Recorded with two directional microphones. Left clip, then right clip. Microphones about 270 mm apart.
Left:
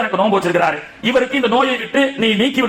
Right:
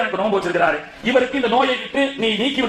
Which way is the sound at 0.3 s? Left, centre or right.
Left.